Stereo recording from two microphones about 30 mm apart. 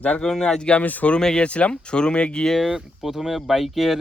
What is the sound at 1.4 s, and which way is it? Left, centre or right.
Speech, left.